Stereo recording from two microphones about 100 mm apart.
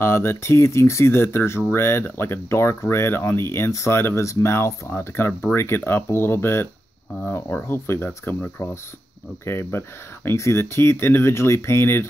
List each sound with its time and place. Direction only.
0.0 s speech: 25° left (ahead or behind)